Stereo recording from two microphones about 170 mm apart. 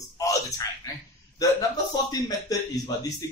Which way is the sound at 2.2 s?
20° left (ahead or behind).